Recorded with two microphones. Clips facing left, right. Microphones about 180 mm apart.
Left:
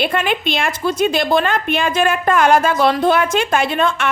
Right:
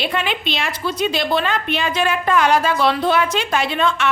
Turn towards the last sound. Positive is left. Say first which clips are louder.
# left 2 dB
turn(degrees=50)  # may be behind; listen again after turning